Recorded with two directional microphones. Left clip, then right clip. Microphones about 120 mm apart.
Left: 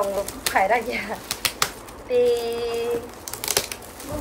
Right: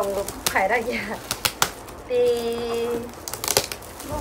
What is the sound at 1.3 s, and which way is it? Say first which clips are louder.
Typewriter: right 2 dB; 35° right (ahead or behind).